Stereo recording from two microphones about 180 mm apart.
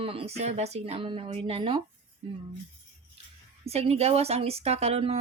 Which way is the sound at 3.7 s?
35° right (ahead or behind).